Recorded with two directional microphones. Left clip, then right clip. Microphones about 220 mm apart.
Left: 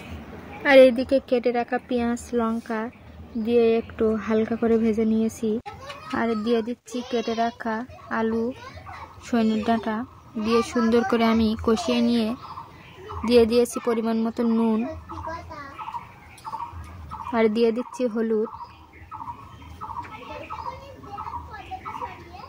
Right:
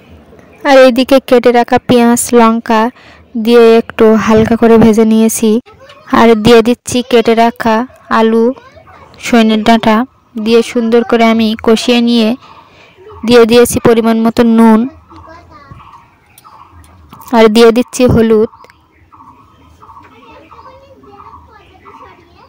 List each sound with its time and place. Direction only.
0.7 s a woman's voice: 55° right (ahead or behind)
17.3 s a woman's voice: 50° right (ahead or behind)